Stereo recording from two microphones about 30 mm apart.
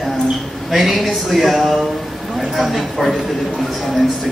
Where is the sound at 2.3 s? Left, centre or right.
Centre.